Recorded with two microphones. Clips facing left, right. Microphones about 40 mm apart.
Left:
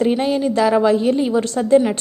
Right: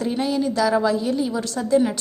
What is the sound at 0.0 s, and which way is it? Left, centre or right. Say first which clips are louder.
A woman's voice: left 5 dB; left.